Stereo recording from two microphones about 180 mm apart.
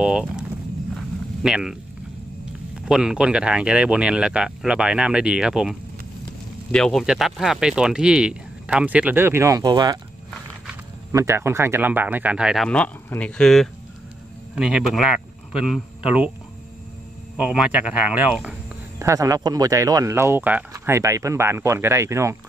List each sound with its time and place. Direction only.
0.0 s speech: 5° right (ahead or behind)
0.9 s a sound: 5° right (ahead or behind)
2.8 s speech: 5° right (ahead or behind); by 9.9 s 20° right (ahead or behind)
11.1 s a man's voice: 15° right (ahead or behind)
17.4 s speech: 5° right (ahead or behind)
18.9 s speech: 15° right (ahead or behind)